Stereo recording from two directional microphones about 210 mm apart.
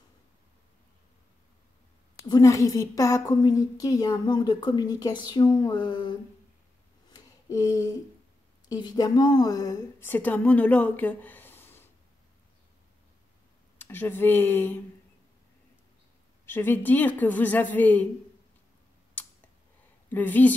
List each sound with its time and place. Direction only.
2.2 s a woman's voice: 15° left (ahead or behind)
7.1 s a sound: 15° left (ahead or behind)
8.6 s a woman's voice: 20° left (ahead or behind)
13.7 s speech: 10° left (ahead or behind)
16.4 s a woman's voice: 10° left (ahead or behind)
19.2 s a sound: 10° left (ahead or behind)
20.1 s a woman's voice: 10° left (ahead or behind)